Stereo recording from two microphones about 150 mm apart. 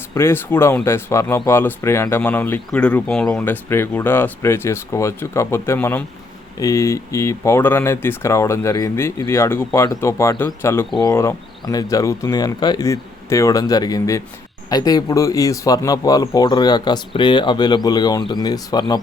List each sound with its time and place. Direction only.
0.1 s speech: 15° left (ahead or behind)